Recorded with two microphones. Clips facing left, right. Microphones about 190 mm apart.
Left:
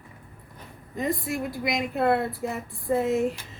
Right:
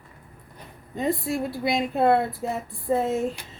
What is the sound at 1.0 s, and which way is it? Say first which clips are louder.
Speech: right 2 dB; 30° right (ahead or behind).